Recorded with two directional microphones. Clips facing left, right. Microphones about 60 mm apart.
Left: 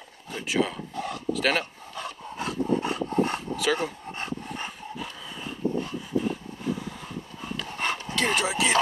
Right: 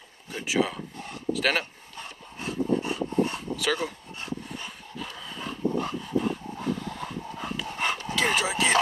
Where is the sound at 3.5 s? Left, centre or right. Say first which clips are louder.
Left 2 dB; centre.